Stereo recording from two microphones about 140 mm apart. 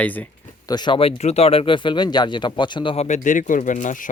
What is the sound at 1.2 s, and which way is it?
Speech, 50° left (ahead or behind).